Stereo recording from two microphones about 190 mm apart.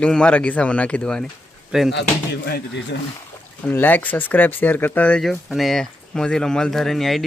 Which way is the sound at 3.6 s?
10° left (ahead or behind).